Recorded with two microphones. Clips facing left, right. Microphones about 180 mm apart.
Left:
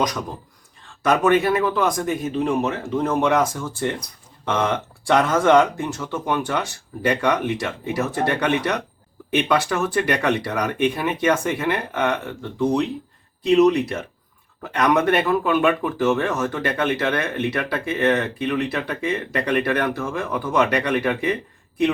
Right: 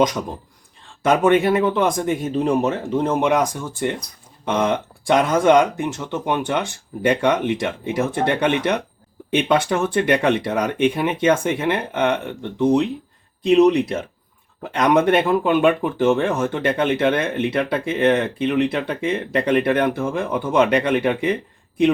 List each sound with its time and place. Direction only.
0.0 s speech: 25° right (ahead or behind)
2.8 s speech: 20° right (ahead or behind)